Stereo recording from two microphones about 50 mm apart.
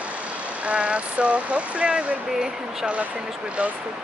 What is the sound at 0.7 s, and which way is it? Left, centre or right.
Speech, right.